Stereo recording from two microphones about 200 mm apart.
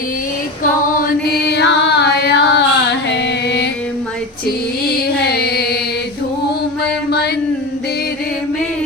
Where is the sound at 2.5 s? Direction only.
60° left (ahead or behind).